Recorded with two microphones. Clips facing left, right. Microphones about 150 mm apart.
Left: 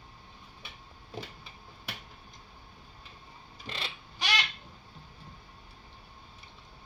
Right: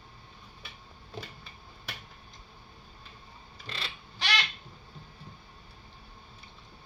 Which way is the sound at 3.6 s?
15° left (ahead or behind).